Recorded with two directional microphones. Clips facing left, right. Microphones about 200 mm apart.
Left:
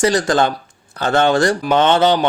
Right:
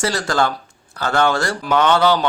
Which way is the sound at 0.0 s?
20° left (ahead or behind).